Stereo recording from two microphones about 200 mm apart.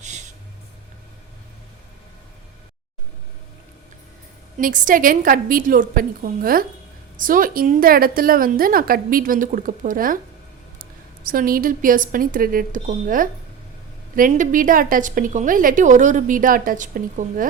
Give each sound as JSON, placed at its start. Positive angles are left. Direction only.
{"t": 4.5, "sound": "a woman's voice", "side_deg": -40}
{"t": 11.3, "sound": "a woman's voice", "side_deg": -45}